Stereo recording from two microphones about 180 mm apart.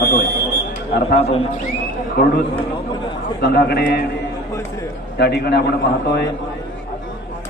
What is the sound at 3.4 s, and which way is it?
Speech, 60° left (ahead or behind).